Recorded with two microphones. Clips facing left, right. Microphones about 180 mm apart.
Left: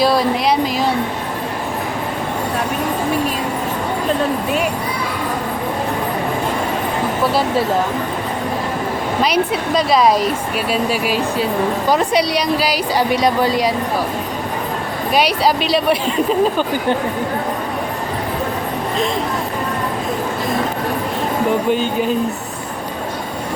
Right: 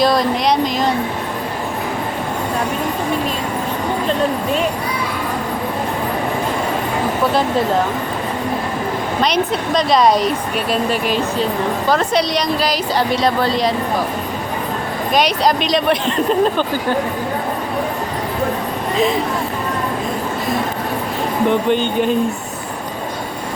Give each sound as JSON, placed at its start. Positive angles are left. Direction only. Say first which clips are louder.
{"t": 0.0, "sound": "speech", "louder": "even", "side_deg": 5}
{"t": 9.2, "sound": "a woman's voice", "louder": "even", "side_deg": 5}
{"t": 15.1, "sound": "a woman's voice", "louder": "even", "side_deg": 5}
{"t": 21.7, "sound": "speech", "louder": "right 1 dB", "side_deg": 5}